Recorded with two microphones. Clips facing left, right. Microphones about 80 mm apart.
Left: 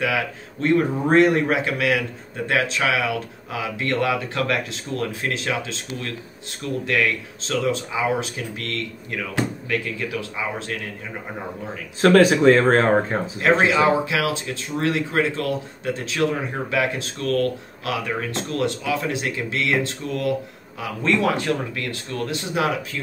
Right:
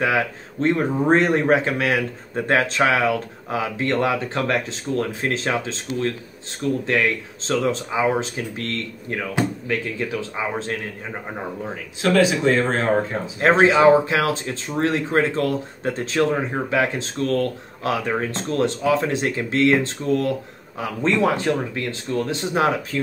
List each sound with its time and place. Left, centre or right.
0.0 s speech: right
12.0 s speech: left
13.4 s speech: right